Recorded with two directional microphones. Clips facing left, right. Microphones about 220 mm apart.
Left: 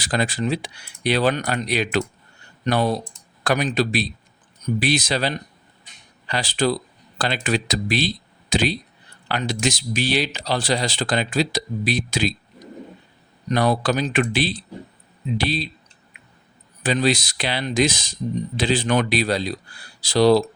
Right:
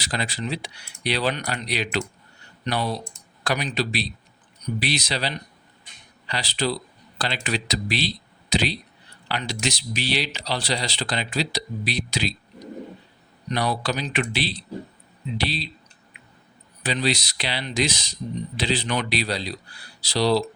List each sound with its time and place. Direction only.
0.0 s speech: 50° left (ahead or behind)
16.8 s speech: 50° left (ahead or behind)